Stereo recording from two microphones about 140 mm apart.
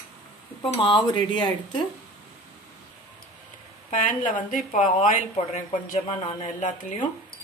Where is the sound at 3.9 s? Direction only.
70° left (ahead or behind).